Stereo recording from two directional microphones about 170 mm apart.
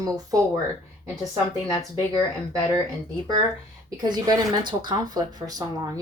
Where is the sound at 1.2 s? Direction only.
20° left (ahead or behind).